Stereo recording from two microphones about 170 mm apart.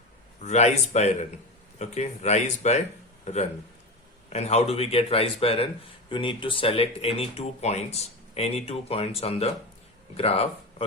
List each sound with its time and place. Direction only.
0.4 s speech: 40° left (ahead or behind)
4.3 s speech: 40° left (ahead or behind)